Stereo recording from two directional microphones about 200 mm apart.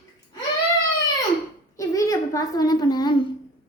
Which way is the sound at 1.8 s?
15° left (ahead or behind).